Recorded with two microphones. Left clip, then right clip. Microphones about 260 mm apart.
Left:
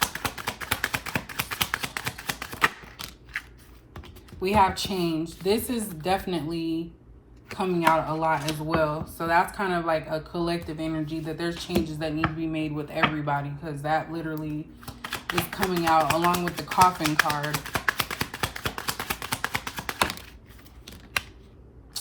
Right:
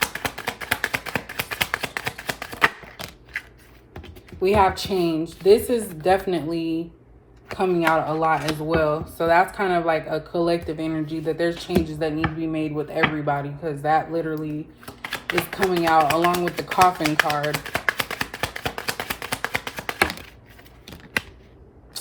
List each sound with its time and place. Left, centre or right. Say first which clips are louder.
0.1 s tap: right 3 dB; centre
4.4 s speech: right 3 dB; centre
17.0 s tap: right 3 dB; centre